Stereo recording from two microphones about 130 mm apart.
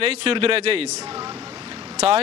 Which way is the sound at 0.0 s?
45° right (ahead or behind).